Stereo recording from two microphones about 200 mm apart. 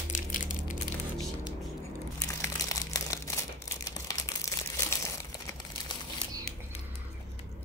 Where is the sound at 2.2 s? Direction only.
15° left (ahead or behind).